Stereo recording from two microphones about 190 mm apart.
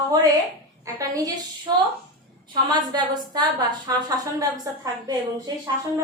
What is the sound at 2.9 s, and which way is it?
A woman's voice, 20° right (ahead or behind).